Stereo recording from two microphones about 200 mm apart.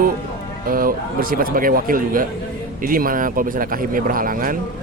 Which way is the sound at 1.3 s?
45° right (ahead or behind).